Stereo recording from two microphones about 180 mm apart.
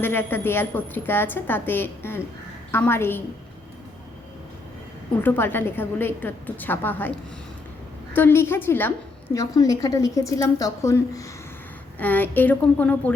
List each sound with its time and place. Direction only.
0.0 s a woman's voice: 10° left (ahead or behind)
5.2 s a woman's voice: 10° left (ahead or behind)